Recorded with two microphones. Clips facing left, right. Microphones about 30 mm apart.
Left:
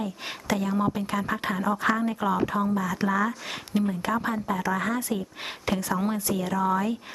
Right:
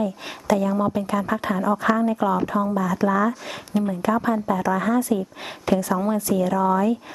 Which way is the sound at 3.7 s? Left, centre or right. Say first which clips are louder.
Right 4 dB; centre.